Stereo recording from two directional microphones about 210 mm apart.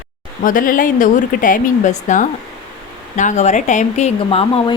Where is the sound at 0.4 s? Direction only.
40° left (ahead or behind).